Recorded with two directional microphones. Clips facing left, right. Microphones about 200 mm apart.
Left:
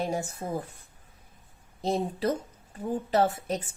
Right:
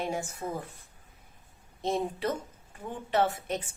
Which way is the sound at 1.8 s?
35° left (ahead or behind).